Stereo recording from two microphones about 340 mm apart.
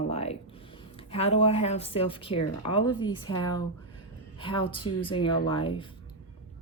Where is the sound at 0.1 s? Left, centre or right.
Centre.